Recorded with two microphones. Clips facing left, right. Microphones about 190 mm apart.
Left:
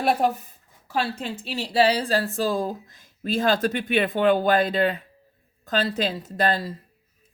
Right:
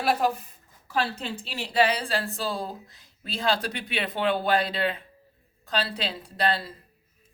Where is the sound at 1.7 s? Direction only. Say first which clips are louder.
Left 4 dB; 35° left (ahead or behind).